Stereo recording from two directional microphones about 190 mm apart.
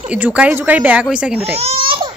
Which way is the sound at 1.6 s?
30° right (ahead or behind).